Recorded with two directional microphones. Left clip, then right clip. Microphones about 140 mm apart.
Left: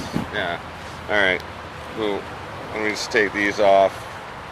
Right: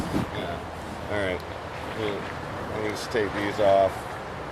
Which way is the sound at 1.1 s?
15° left (ahead or behind).